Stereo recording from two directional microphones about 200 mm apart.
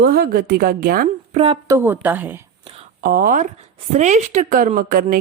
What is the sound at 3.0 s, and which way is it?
A woman's voice, 45° right (ahead or behind).